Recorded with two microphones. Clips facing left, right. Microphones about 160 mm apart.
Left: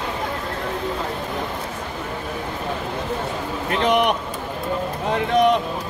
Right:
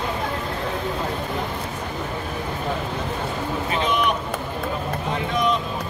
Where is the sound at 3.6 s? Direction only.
70° left (ahead or behind).